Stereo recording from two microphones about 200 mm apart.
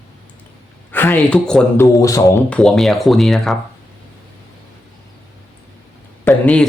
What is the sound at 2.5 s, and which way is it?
Speech, centre (ahead or behind).